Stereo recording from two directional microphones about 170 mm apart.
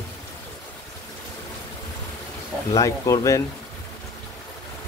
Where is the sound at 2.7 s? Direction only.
20° left (ahead or behind).